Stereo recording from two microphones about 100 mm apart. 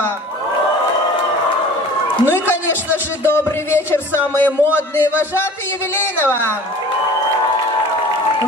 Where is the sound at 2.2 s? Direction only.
20° left (ahead or behind).